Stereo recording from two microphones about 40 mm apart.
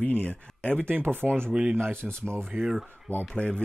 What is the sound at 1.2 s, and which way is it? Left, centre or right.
Speech, centre.